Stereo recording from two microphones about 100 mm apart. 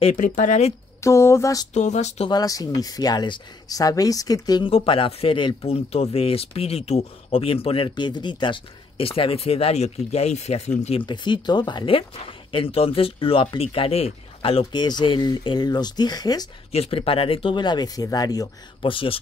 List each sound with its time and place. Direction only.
1.0 s speech: 30° left (ahead or behind)
4.6 s speech: 65° left (ahead or behind)
5.6 s speech: 90° left; by 7.9 s 70° left (ahead or behind)
7.9 s speech: 50° left (ahead or behind); by 11.1 s 90° left
11.1 s speech: 50° left (ahead or behind); by 14.7 s 70° left (ahead or behind)
14.7 s speech: 45° left (ahead or behind)
16.7 s speech: 70° left (ahead or behind); by 18.5 s 40° left (ahead or behind)
18.8 s speech: 65° left (ahead or behind)